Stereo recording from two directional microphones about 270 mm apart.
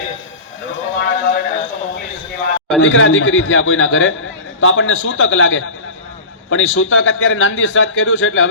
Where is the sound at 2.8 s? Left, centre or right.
Left.